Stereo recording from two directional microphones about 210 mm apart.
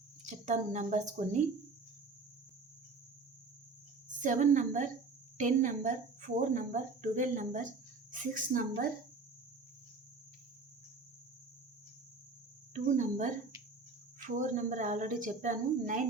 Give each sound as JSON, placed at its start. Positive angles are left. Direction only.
{"t": 0.4, "sound": "speech", "side_deg": -35}
{"t": 4.2, "sound": "speech", "side_deg": -35}
{"t": 12.7, "sound": "speech", "side_deg": -35}